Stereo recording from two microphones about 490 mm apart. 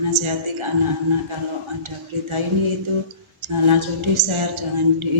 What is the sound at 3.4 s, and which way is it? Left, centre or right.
A woman's voice, right.